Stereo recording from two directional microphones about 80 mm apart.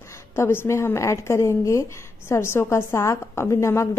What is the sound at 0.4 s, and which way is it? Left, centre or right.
A woman's voice, left.